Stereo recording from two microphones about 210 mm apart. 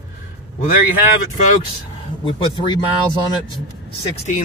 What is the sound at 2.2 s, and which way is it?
Speech, 25° left (ahead or behind).